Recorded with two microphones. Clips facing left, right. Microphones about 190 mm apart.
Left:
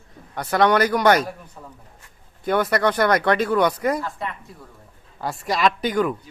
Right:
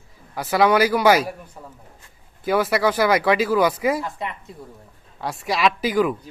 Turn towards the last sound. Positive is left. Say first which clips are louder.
# right 1 dB
turn(degrees=-5)  # may be behind; listen again after turning